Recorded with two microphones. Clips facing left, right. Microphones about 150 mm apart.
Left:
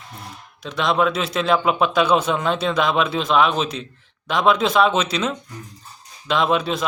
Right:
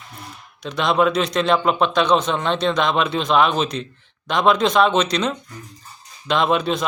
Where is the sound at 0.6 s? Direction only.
Centre (ahead or behind).